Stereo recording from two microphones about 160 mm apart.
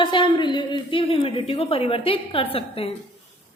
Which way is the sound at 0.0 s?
30° left (ahead or behind).